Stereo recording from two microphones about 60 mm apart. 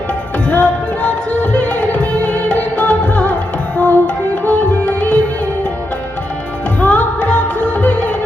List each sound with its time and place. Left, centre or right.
0.4 s music: left
6.7 s music: left